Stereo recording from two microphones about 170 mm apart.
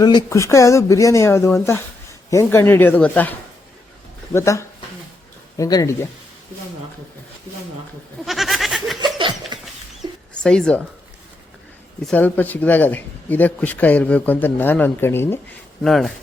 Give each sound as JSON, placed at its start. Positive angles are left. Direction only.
{"t": 0.3, "sound": "speech", "side_deg": 15}
{"t": 8.2, "sound": "a sound", "side_deg": 0}
{"t": 10.0, "sound": "dog", "side_deg": 5}
{"t": 12.0, "sound": "speech", "side_deg": 10}
{"t": 15.8, "sound": "speech", "side_deg": 0}